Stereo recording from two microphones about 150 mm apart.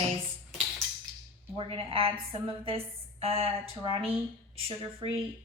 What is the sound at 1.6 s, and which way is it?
A woman's voice, 40° right (ahead or behind).